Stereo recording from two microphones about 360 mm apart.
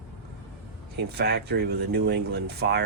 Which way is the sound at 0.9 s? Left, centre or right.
Right.